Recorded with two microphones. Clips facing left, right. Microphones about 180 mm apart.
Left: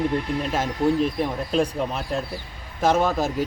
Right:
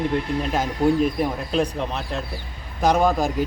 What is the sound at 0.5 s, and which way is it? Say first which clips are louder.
Speech: right 2 dB; centre (ahead or behind).